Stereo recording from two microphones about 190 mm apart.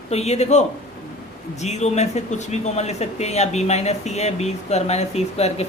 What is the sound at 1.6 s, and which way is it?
Speech, 35° left (ahead or behind).